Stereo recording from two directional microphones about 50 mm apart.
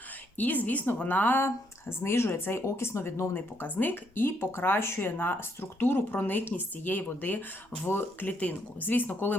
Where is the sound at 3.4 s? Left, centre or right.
Left.